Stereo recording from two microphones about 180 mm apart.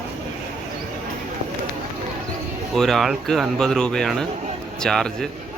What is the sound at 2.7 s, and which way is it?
Speech, centre (ahead or behind).